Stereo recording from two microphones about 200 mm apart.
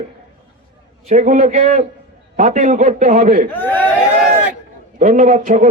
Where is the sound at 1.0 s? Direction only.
40° right (ahead or behind).